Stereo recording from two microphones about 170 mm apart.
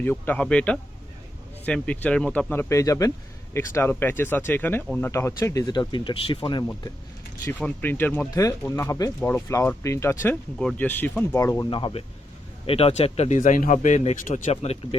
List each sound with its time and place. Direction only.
0.0 s speech: 10° left (ahead or behind); by 6.7 s 25° left (ahead or behind)
7.6 s speech: 10° left (ahead or behind)
11.3 s speech: 15° left (ahead or behind)
11.7 s speech: 30° left (ahead or behind)